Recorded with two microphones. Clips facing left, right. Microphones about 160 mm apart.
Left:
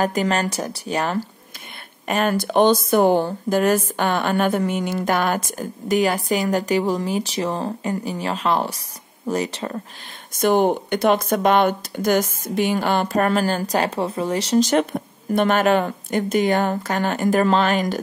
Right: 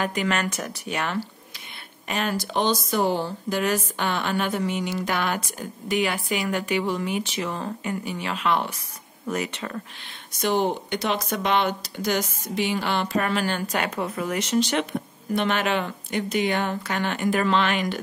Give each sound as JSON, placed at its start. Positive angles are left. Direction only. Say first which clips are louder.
{"t": 0.0, "sound": "speech", "louder": "left 5 dB", "side_deg": 40}
{"t": 2.0, "sound": "speech", "louder": "left 6 dB", "side_deg": 50}
{"t": 10.3, "sound": "speech", "louder": "left 6 dB", "side_deg": 50}